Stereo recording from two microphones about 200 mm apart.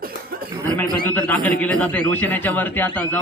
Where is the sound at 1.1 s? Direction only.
10° left (ahead or behind).